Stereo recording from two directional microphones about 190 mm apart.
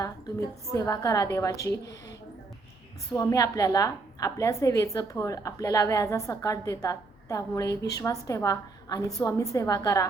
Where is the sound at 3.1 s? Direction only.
15° left (ahead or behind).